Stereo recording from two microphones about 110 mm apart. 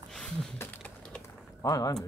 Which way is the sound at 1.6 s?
30° left (ahead or behind).